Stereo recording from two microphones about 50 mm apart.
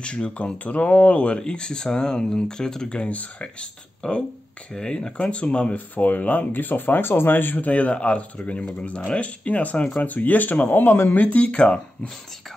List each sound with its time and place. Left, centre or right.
0.0 s speech: left
10.8 s speech: left
11.1 s speech: left